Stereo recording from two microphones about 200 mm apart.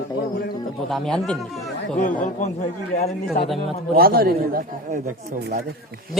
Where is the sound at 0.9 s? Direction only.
Centre (ahead or behind).